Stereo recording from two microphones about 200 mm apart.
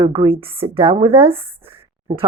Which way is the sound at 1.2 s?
10° right (ahead or behind).